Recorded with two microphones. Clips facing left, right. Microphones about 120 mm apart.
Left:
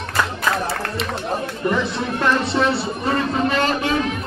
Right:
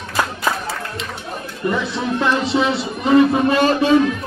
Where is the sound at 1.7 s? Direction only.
10° right (ahead or behind).